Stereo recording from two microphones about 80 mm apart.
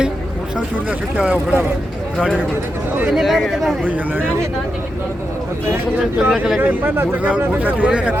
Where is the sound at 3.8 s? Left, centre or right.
Right.